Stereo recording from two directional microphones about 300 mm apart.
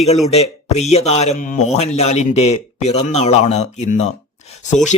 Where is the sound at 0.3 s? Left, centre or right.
Left.